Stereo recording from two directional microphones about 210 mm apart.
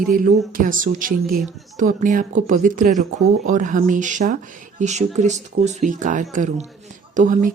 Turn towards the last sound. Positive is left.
turn(degrees=-40)  # may be behind; listen again after turning